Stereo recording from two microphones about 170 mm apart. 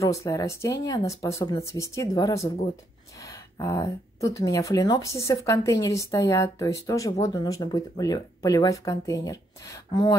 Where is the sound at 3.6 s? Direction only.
20° left (ahead or behind).